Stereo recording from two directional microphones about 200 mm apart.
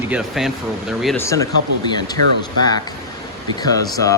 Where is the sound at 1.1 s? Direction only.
15° left (ahead or behind).